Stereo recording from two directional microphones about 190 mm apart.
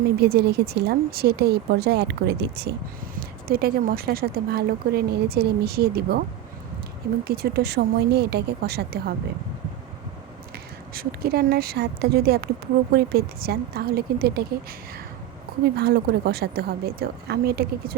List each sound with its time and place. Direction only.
0.2 s speech: 60° right (ahead or behind)
7.3 s speech: 55° right (ahead or behind)
10.9 s speech: 55° right (ahead or behind)
15.7 s speech: 60° right (ahead or behind)